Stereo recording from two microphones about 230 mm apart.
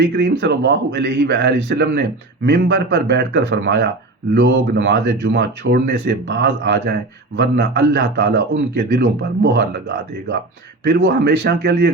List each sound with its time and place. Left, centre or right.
0.0 s speech: right